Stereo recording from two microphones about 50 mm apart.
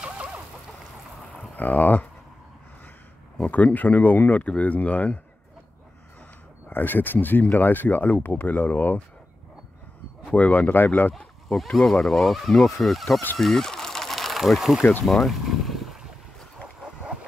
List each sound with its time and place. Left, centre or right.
0.0 s chicken: right
1.6 s speech: left
3.3 s speech: left
6.7 s speech: left
10.3 s speech: left
11.1 s speech: centre
13.4 s a sound: centre
14.8 s speech: left
15.0 s boat: centre
16.3 s dog: centre